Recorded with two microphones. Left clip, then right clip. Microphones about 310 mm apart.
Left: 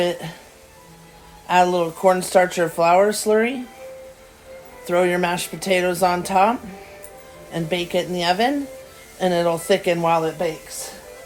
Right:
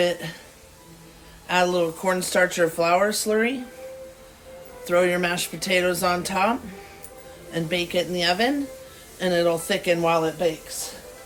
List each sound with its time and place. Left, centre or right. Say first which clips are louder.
0.0 s speech: left 1 dB; centre
1.5 s speech: left 4 dB; centre
4.9 s speech: left 2 dB; centre
7.5 s speech: left 2 dB; centre